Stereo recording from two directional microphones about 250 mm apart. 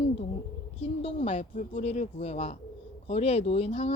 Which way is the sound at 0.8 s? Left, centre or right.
Left.